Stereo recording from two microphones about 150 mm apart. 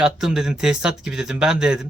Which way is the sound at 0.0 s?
5° right (ahead or behind).